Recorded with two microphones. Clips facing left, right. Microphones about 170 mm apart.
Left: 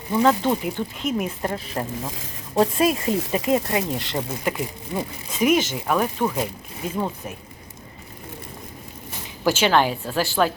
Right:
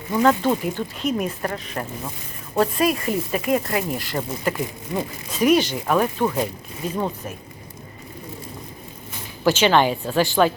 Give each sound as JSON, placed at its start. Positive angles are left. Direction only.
{"t": 0.1, "sound": "speech", "side_deg": 10}
{"t": 4.5, "sound": "a woman's voice", "side_deg": 10}
{"t": 9.4, "sound": "a woman's voice", "side_deg": 10}